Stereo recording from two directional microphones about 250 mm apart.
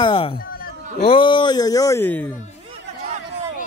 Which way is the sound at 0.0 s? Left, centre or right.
Left.